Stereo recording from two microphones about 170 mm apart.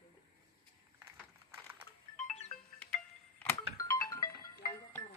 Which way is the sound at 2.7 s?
10° left (ahead or behind).